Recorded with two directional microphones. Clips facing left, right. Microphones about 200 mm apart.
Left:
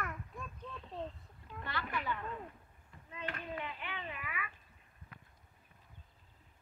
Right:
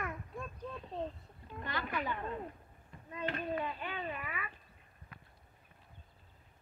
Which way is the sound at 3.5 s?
40° right (ahead or behind).